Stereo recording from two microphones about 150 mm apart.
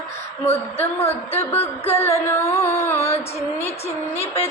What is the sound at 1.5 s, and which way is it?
Music, 15° left (ahead or behind).